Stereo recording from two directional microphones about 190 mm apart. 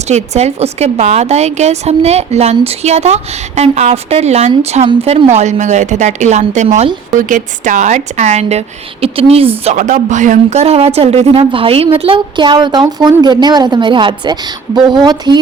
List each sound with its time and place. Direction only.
0.1 s a woman's voice: 35° right (ahead or behind)
9.6 s a woman's voice: 40° right (ahead or behind); by 15.4 s 20° right (ahead or behind)